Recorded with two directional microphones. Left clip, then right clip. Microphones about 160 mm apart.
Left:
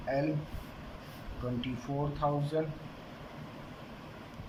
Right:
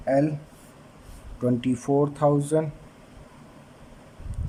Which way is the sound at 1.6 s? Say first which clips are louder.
Right 13 dB; 60° right (ahead or behind).